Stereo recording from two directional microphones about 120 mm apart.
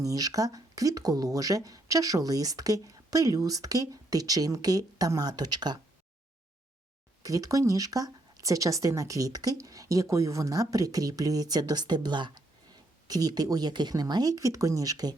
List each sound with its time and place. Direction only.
0.0 s speech: 30° right (ahead or behind)
7.2 s speech: 30° right (ahead or behind)